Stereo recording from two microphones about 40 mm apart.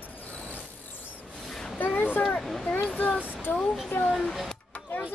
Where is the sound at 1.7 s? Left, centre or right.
Left.